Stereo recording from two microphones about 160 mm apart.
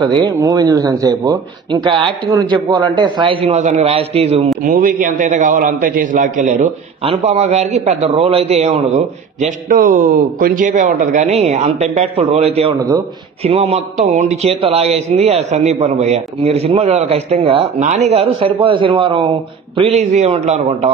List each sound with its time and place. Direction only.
0.4 s speech: 20° right (ahead or behind)
3.5 s speech: 45° right (ahead or behind)
4.6 s a man's voice: 60° right (ahead or behind)
7.0 s a man's voice: 40° right (ahead or behind)
19.8 s a man's voice: 45° right (ahead or behind)